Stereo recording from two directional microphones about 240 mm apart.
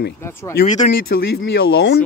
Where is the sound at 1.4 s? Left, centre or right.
Left.